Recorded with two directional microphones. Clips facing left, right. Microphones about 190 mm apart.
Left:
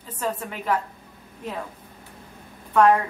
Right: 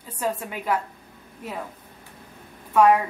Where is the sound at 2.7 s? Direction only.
5° right (ahead or behind).